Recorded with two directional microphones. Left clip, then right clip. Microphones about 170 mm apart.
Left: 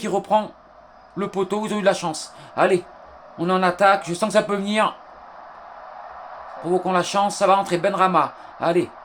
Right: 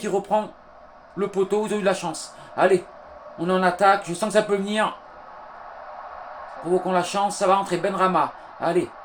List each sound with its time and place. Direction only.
0.0 s speech: 50° left (ahead or behind)
6.8 s speech: 45° left (ahead or behind)